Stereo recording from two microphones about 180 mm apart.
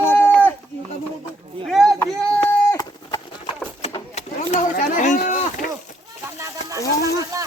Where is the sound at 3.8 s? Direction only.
35° left (ahead or behind).